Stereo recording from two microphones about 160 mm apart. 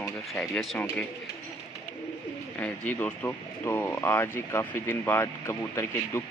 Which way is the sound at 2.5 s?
10° left (ahead or behind).